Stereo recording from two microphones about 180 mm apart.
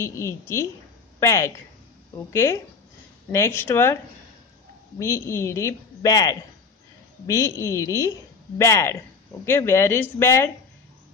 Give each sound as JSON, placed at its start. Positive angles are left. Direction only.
{"t": 0.0, "sound": "a woman's voice", "side_deg": 15}